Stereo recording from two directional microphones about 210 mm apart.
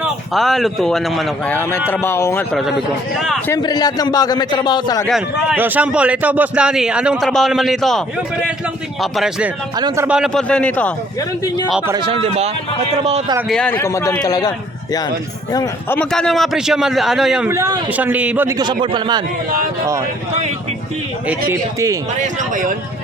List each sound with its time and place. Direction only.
0.0 s a man's voice: centre (ahead or behind)
3.5 s a man's voice: 20° left (ahead or behind)
5.0 s a man's voice: centre (ahead or behind)
9.7 s speech: 15° right (ahead or behind)
10.2 s a man's voice: centre (ahead or behind)
11.4 s a man's voice: 20° left (ahead or behind)
11.9 s a man's voice: 25° right (ahead or behind)
13.5 s a man's voice: 5° left (ahead or behind)
15.5 s a man's voice: 10° left (ahead or behind)
17.5 s speech: 15° right (ahead or behind)
22.2 s speech: 35° right (ahead or behind)